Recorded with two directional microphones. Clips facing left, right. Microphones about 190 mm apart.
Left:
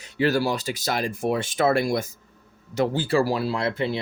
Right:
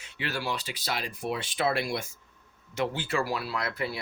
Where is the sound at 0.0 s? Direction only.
40° left (ahead or behind).